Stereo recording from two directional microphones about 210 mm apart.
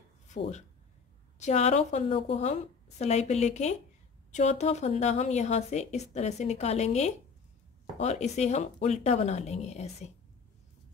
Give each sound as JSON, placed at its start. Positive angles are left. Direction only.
{"t": 0.3, "sound": "speech", "side_deg": 35}